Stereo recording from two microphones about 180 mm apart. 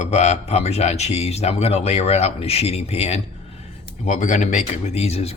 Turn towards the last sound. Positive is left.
turn(degrees=35)  # may be behind; listen again after turning